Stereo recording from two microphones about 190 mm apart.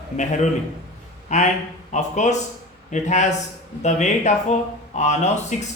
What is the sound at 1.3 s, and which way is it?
Speech, 40° left (ahead or behind).